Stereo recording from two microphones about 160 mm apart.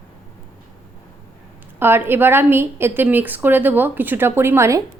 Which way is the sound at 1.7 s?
15° right (ahead or behind).